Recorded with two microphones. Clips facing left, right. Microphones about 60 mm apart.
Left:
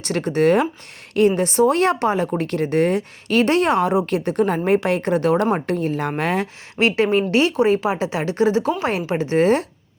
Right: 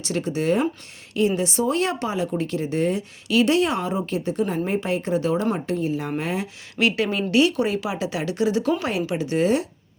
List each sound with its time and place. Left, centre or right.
0.0 s speech: left
6.7 s a woman's voice: left